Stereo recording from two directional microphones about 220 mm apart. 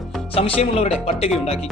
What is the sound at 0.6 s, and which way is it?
Speech, 30° left (ahead or behind).